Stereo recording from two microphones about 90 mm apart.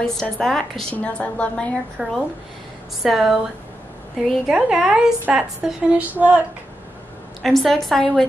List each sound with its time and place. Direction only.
0.0 s a woman's voice: 5° left (ahead or behind)
2.0 s a woman's voice: 10° right (ahead or behind)
7.4 s a woman's voice: centre (ahead or behind)